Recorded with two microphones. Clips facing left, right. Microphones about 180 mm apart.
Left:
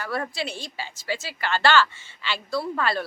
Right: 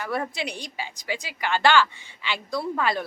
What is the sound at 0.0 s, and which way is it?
A woman's voice, 20° right (ahead or behind).